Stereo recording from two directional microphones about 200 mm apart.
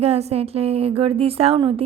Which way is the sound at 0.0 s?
30° right (ahead or behind).